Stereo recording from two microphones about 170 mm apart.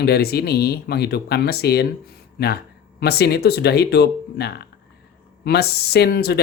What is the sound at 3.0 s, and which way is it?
Speech, 70° left (ahead or behind).